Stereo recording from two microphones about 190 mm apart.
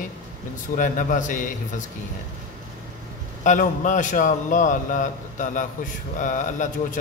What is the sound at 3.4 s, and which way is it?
A man's voice, 40° left (ahead or behind).